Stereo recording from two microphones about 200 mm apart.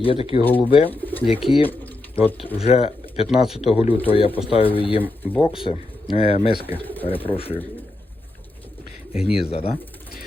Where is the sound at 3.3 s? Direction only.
Centre (ahead or behind).